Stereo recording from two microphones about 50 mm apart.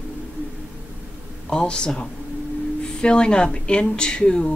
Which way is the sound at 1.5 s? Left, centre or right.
Centre.